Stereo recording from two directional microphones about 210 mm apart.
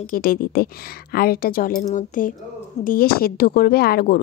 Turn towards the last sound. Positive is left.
turn(degrees=45)  # may be behind; listen again after turning